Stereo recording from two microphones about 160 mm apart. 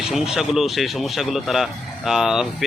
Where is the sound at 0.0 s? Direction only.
5° right (ahead or behind).